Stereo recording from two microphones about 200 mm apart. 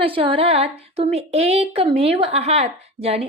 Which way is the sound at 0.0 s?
25° right (ahead or behind).